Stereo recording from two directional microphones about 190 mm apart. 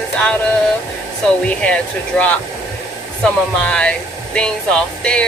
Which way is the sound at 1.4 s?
5° left (ahead or behind).